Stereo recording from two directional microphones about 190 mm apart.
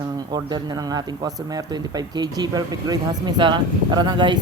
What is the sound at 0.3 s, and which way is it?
Speech, 20° right (ahead or behind).